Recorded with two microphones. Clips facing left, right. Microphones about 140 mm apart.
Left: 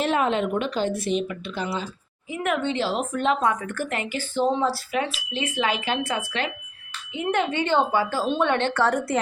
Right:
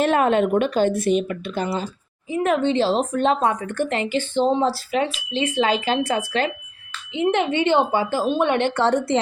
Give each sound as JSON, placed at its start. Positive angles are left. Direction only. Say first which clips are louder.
{"t": 0.0, "sound": "speech", "louder": "right 5 dB", "side_deg": -50}
{"t": 2.3, "sound": "speech", "louder": "right 6 dB", "side_deg": -30}
{"t": 7.2, "sound": "a woman's voice", "louder": "right 4 dB", "side_deg": -20}
{"t": 8.8, "sound": "speech", "louder": "right 3 dB", "side_deg": -25}